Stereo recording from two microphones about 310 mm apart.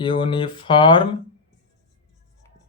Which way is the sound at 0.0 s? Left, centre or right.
Centre.